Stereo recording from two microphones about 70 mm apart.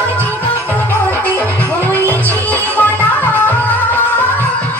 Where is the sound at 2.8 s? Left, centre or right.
Left.